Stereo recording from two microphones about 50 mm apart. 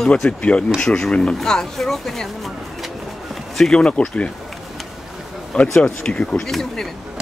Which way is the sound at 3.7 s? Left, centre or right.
Left.